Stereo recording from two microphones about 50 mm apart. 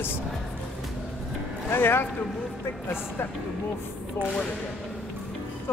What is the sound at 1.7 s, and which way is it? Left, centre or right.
Speech, left.